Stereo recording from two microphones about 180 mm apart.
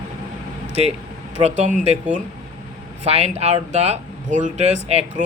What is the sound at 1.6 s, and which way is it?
Speech, 40° right (ahead or behind).